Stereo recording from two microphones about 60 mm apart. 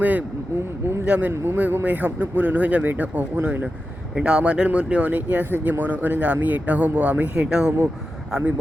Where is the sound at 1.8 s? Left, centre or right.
Right.